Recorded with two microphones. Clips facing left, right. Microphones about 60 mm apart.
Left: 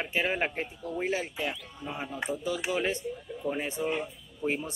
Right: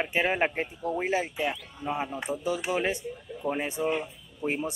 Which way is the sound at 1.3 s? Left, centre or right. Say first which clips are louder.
Right 3 dB; centre.